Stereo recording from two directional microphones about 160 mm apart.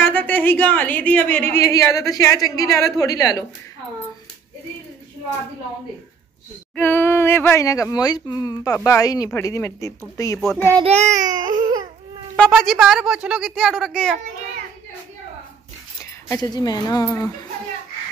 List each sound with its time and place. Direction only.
0.0 s a woman's voice: 10° left (ahead or behind)
6.7 s a woman's voice: 15° left (ahead or behind)
10.8 s a child's voice: 40° right (ahead or behind)
12.4 s a woman's voice: 5° left (ahead or behind)
16.0 s speech: 20° left (ahead or behind)